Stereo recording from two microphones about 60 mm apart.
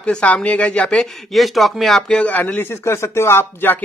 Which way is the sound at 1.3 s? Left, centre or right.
Centre.